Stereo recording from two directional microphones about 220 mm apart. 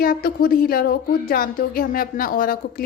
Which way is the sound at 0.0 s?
40° left (ahead or behind).